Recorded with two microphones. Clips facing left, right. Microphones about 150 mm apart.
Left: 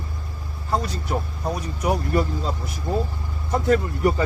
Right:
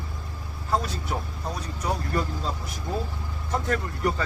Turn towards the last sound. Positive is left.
turn(degrees=10)  # may be behind; listen again after turning